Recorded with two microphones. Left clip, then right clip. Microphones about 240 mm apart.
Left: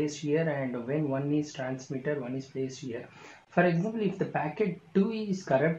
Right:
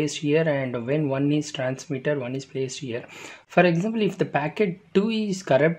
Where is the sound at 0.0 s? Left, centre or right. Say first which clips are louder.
Right 7 dB; right.